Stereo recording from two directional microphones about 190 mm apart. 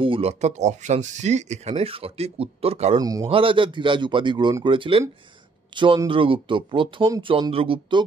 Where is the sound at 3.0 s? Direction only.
20° right (ahead or behind).